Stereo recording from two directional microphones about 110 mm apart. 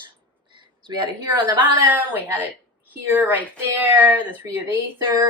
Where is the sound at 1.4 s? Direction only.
15° right (ahead or behind).